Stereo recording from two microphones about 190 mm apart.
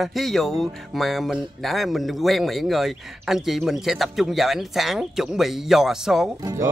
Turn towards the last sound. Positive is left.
turn(degrees=-20)  # may be behind; listen again after turning